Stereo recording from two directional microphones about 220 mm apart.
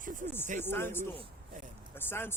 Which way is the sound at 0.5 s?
10° left (ahead or behind).